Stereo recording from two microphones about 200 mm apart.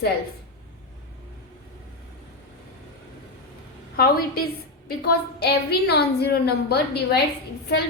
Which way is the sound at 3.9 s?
50° left (ahead or behind).